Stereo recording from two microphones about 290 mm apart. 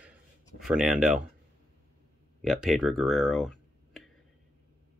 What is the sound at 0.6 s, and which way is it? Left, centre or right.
Speech, centre.